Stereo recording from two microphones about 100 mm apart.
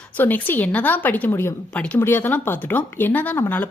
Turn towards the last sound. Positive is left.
turn(degrees=20)  # may be behind; listen again after turning